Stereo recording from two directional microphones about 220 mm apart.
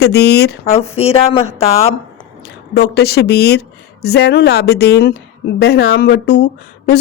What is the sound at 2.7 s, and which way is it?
A woman's voice, 45° left (ahead or behind).